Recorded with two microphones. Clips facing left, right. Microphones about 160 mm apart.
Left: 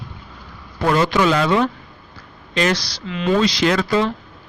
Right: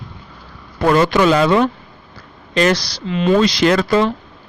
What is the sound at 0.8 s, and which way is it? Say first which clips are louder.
Speech: right 3 dB; 55° right (ahead or behind).